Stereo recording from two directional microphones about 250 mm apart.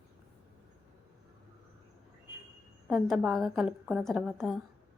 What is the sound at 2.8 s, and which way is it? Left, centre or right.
A woman's voice, centre.